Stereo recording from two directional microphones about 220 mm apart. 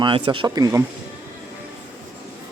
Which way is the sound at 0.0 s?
20° right (ahead or behind).